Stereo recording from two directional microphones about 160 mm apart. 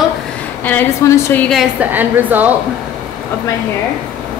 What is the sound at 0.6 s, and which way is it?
Speech, 10° left (ahead or behind).